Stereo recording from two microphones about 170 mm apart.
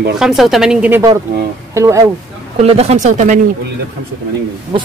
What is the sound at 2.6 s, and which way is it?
Speech, 40° right (ahead or behind).